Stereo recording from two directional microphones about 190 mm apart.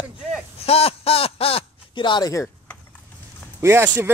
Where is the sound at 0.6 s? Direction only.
30° left (ahead or behind); by 2.8 s 15° left (ahead or behind).